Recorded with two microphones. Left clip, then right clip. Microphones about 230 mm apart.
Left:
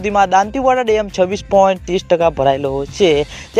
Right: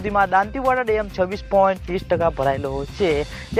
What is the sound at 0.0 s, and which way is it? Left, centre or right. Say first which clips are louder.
Speech: left 5 dB; left.